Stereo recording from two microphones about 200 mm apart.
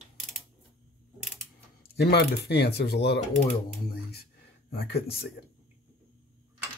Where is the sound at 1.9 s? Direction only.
50° left (ahead or behind).